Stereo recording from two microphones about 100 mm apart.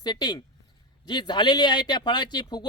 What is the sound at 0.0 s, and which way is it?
Speech, 45° left (ahead or behind).